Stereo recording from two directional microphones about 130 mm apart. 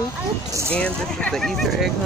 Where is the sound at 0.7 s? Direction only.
10° left (ahead or behind).